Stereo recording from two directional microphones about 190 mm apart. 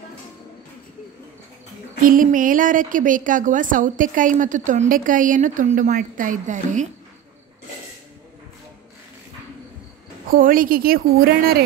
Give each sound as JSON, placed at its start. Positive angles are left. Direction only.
{"t": 2.0, "sound": "a woman's voice", "side_deg": -45}
{"t": 10.3, "sound": "a woman's voice", "side_deg": -45}